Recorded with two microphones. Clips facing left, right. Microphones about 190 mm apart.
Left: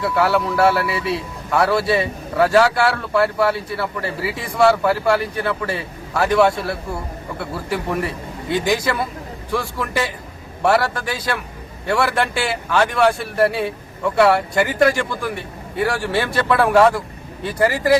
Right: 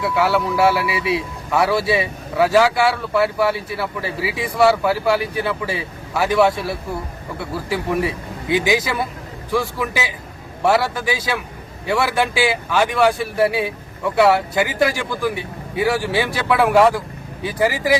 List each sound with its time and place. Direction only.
0.0 s a man's voice: centre (ahead or behind)